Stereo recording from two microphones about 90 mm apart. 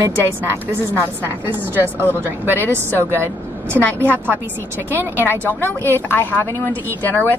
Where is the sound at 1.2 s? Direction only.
25° right (ahead or behind).